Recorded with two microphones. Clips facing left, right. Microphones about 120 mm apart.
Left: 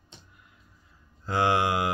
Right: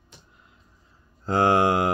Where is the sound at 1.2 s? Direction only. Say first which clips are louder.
Right 5 dB; 45° right (ahead or behind).